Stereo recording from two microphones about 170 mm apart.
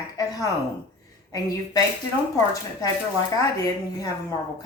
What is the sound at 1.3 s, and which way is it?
Speech, 20° left (ahead or behind).